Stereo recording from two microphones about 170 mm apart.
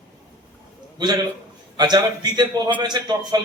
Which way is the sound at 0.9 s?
25° right (ahead or behind).